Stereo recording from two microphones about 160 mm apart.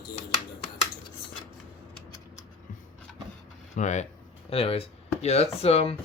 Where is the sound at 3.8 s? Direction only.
50° left (ahead or behind).